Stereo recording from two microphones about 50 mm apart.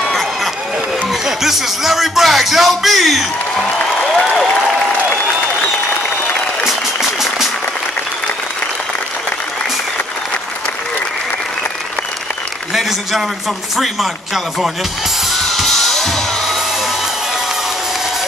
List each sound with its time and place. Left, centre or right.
0.0 s run: centre
1.2 s speech: centre
4.0 s applause: centre
6.6 s a sound: centre
13.7 s speech: centre
15.5 s music: centre